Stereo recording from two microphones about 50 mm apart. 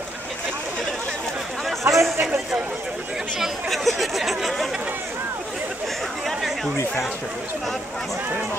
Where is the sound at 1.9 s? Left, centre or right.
Right.